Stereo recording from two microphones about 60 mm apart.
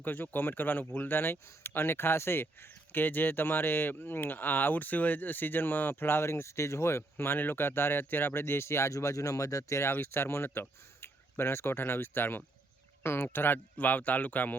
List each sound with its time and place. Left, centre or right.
0.0 s speech: left
8.9 s speech: left
9.9 s speech: left
13.7 s speech: left